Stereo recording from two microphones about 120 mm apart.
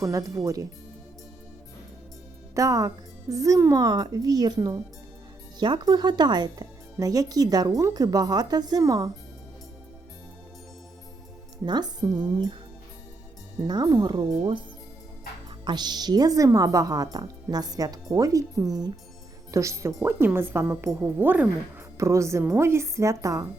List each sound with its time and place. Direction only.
0.0 s speech: 25° right (ahead or behind)
2.6 s speech: 30° right (ahead or behind)
11.6 s speech: 35° right (ahead or behind)
13.6 s speech: 30° right (ahead or behind)
15.6 s speech: 35° right (ahead or behind)